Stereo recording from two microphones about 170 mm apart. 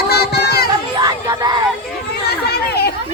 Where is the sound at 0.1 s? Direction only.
75° left (ahead or behind).